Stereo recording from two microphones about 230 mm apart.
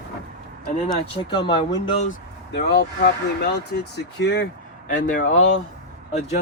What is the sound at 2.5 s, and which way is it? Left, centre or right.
Speech, left.